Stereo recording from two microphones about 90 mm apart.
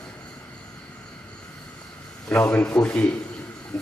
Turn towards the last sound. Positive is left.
turn(degrees=5)  # may be behind; listen again after turning